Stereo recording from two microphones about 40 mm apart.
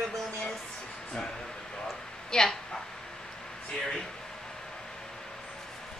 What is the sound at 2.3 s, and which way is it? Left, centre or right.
Speech, centre.